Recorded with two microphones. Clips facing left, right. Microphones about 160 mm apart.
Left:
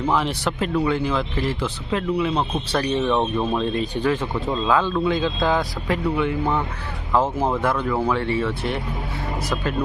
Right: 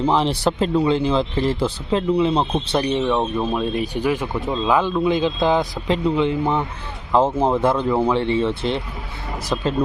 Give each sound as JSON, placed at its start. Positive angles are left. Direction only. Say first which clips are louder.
{"t": 0.0, "sound": "speech", "louder": "right 4 dB", "side_deg": -30}
{"t": 2.9, "sound": "speech", "louder": "left 2 dB", "side_deg": -10}